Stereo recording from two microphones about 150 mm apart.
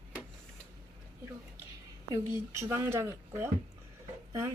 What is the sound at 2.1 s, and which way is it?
A woman's voice, 20° right (ahead or behind).